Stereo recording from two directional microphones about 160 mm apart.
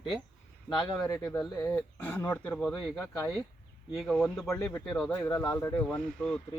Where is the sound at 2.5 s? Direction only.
Centre (ahead or behind).